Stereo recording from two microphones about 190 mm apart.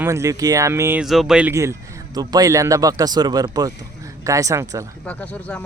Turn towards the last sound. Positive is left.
turn(degrees=10)  # may be behind; listen again after turning